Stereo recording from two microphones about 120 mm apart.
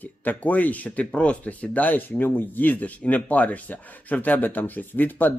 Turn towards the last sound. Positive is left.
turn(degrees=15)  # may be behind; listen again after turning